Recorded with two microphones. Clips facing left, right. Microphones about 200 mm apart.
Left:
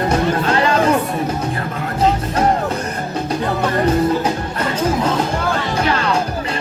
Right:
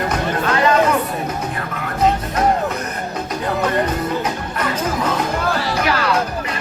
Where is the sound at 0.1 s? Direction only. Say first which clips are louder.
Left 3 dB; 30° left (ahead or behind).